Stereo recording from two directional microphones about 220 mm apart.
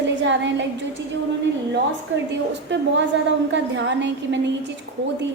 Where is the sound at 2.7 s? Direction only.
55° right (ahead or behind).